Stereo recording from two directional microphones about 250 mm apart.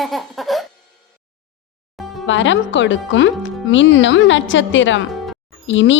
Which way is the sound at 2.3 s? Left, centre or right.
Left.